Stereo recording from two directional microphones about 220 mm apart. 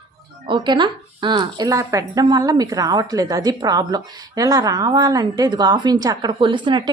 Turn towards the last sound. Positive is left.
turn(degrees=-20)  # may be behind; listen again after turning